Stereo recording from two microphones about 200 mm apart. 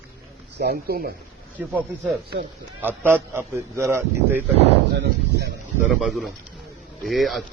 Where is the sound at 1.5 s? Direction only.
10° right (ahead or behind).